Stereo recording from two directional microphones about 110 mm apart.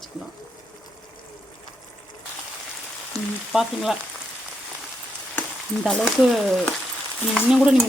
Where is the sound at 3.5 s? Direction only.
5° right (ahead or behind).